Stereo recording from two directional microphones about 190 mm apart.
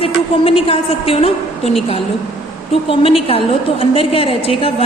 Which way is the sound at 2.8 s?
30° left (ahead or behind).